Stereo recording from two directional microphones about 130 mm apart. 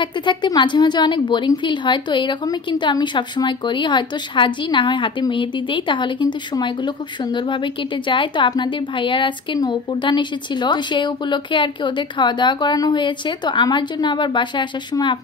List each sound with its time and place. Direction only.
0.0 s speech: 35° left (ahead or behind)